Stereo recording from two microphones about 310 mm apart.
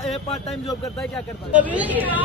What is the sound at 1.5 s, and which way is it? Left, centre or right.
Speech, centre.